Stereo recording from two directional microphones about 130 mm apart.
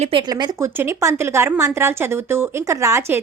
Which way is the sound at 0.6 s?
20° right (ahead or behind).